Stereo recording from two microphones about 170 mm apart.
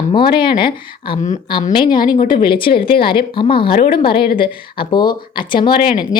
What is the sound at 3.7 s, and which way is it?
Speech, 60° left (ahead or behind).